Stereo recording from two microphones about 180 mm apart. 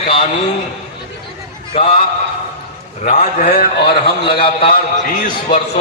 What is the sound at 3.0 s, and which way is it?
Speech, 40° left (ahead or behind).